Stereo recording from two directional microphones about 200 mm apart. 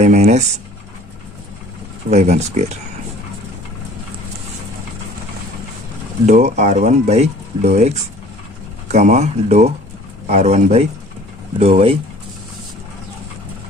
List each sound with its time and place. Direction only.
0.0 s a sound: 35° right (ahead or behind)
2.0 s speech: 35° right (ahead or behind)
6.2 s speech: 35° right (ahead or behind)